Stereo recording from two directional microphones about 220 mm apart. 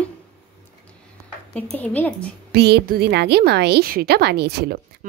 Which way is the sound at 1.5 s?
5° left (ahead or behind).